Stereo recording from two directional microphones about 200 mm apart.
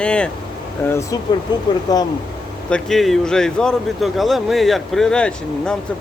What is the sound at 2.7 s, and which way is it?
Speech, 5° left (ahead or behind).